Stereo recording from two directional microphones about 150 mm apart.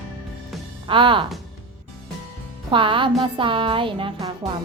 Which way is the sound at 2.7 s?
35° right (ahead or behind).